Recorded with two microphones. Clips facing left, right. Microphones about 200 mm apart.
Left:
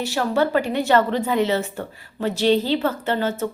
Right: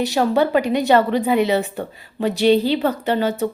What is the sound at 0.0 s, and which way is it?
A woman's voice, 20° right (ahead or behind).